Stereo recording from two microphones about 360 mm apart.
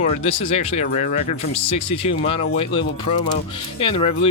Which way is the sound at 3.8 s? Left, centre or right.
Centre.